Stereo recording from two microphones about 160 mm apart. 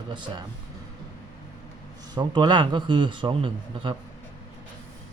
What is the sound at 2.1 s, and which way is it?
A man's voice, 30° right (ahead or behind).